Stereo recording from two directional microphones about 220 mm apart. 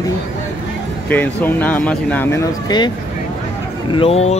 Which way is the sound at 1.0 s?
10° left (ahead or behind).